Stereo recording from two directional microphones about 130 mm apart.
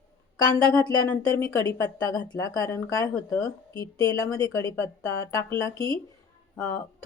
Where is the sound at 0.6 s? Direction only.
30° left (ahead or behind).